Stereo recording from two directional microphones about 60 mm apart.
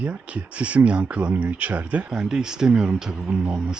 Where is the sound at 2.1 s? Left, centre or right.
Centre.